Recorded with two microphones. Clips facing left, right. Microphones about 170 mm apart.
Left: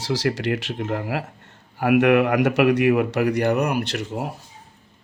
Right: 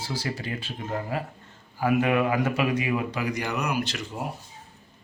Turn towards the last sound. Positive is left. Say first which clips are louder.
# left 4 dB
turn(degrees=80)